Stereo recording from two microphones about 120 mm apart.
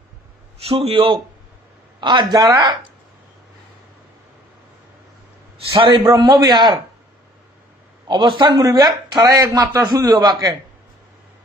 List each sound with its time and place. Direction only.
0.6 s a man's voice: 55° right (ahead or behind)
5.8 s a man's voice: 40° right (ahead or behind)
8.1 s a man's voice: 40° right (ahead or behind)